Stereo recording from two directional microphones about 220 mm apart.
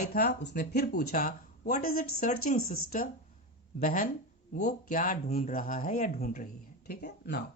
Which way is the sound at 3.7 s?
40° left (ahead or behind).